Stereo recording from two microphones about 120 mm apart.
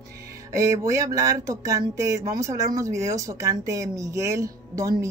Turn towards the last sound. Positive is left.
turn(degrees=-25)  # may be behind; listen again after turning